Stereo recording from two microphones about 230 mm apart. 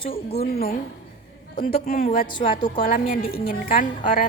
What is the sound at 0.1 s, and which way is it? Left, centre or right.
Speech, left.